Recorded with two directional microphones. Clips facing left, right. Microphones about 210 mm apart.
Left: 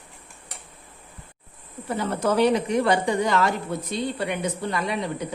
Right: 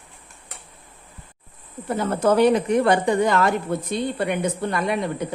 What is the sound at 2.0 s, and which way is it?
A woman's voice, 50° right (ahead or behind).